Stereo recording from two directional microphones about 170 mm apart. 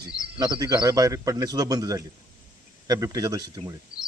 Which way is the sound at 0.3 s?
25° right (ahead or behind).